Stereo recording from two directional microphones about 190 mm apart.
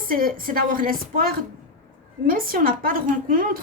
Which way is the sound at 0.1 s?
50° right (ahead or behind).